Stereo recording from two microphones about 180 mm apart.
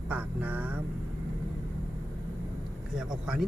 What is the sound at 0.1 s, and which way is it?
Vehicle, 10° right (ahead or behind).